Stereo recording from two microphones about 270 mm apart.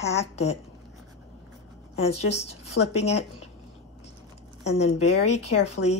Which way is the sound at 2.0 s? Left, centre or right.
Left.